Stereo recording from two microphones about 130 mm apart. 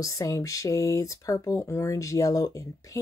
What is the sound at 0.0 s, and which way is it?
Speech, 25° left (ahead or behind).